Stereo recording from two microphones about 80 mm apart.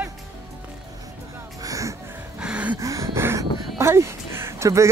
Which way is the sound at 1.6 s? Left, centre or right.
Right.